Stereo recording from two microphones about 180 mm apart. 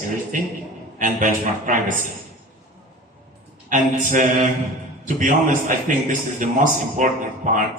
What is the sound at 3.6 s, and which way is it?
A man's voice, 45° right (ahead or behind).